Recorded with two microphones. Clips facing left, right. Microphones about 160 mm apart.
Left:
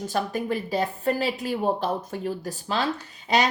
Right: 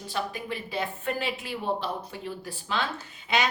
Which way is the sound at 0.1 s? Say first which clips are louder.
Left 5 dB; 45° left (ahead or behind).